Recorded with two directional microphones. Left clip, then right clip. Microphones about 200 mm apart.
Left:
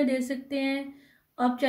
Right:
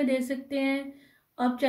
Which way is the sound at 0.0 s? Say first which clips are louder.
Even; centre (ahead or behind).